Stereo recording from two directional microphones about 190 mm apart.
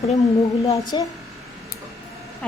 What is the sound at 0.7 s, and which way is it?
Speech, 20° left (ahead or behind).